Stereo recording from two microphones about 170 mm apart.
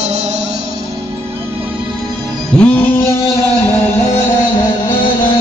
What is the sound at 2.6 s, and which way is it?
Music, 10° left (ahead or behind).